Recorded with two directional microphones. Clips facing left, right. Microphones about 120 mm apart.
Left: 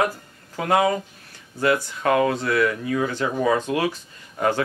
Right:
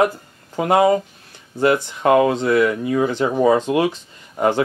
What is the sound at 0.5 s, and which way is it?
Speech, 25° right (ahead or behind).